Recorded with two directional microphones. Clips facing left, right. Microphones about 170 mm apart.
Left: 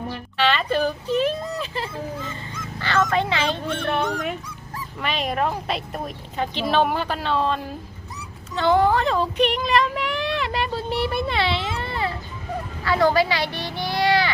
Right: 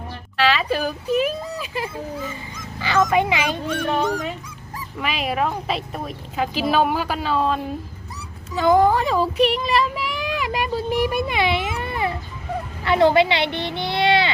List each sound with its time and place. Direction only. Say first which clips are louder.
0.3 s a sound: right 1 dB; centre (ahead or behind)
2.7 s speech: right 3 dB; 10° right (ahead or behind)
4.9 s a woman's voice: right 1 dB; 5° right (ahead or behind); by 14.3 s 25° right (ahead or behind)